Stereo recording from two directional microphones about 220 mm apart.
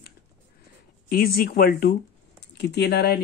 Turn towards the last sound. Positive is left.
turn(degrees=50)  # may be behind; listen again after turning